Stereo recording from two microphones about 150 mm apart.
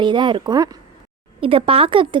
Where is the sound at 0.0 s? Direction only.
30° right (ahead or behind).